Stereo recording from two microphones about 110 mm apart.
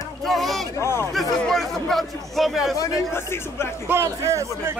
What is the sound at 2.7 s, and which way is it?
Speech, 25° left (ahead or behind).